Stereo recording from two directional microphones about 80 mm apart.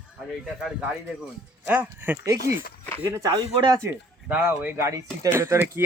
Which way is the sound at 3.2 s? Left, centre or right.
Right.